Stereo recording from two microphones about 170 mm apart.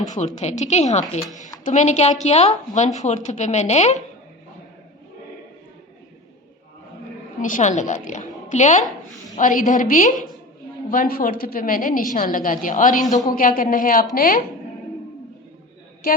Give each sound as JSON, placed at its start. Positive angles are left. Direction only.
{"t": 0.3, "sound": "a woman's voice", "side_deg": 45}
{"t": 7.4, "sound": "a woman's voice", "side_deg": 50}
{"t": 13.1, "sound": "a man's voice", "side_deg": 20}
{"t": 13.3, "sound": "a woman's voice", "side_deg": 55}
{"t": 16.0, "sound": "a woman's voice", "side_deg": 60}